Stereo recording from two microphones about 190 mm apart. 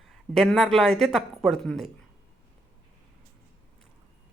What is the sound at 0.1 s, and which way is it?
A woman's voice, centre (ahead or behind).